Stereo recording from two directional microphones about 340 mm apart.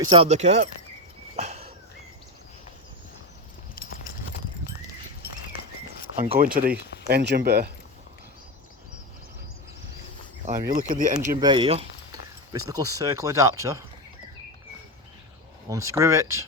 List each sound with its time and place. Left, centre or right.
0.0 s speech: centre
1.4 s a sound: centre
3.8 s clip-clop: left
6.1 s speech: centre
10.4 s speech: right
16.0 s speech: centre